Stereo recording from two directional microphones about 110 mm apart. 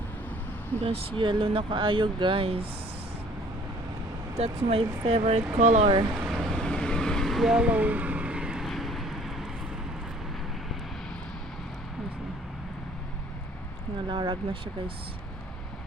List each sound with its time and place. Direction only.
0.9 s speech: 50° right (ahead or behind)
4.4 s speech: 70° right (ahead or behind); by 5.9 s 90° right
6.2 s vehicle: centre (ahead or behind)
14.1 s speech: 50° right (ahead or behind)